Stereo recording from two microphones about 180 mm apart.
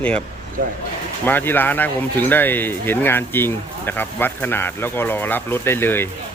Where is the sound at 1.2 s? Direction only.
10° left (ahead or behind).